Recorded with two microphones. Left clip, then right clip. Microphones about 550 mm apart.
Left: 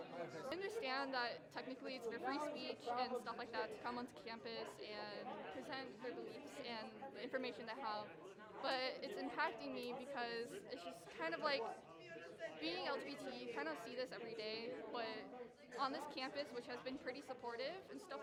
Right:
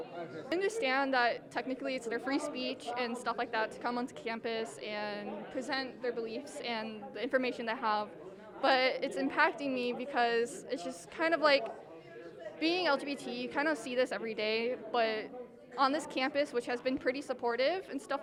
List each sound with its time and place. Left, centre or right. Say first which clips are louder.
0.5 s a woman's voice: right 14 dB; right